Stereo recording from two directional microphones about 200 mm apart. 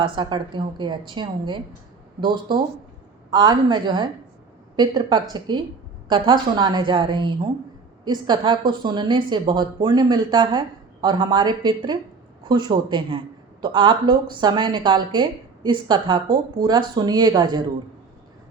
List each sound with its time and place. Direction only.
0.2 s a woman's voice: 25° right (ahead or behind)